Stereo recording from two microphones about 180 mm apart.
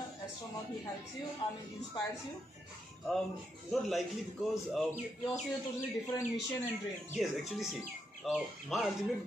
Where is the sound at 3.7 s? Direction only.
Centre (ahead or behind).